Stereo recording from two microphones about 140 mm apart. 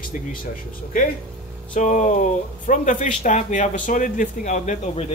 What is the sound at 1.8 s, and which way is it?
Speech, 60° left (ahead or behind).